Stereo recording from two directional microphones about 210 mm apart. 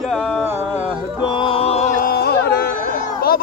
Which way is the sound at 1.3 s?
25° left (ahead or behind).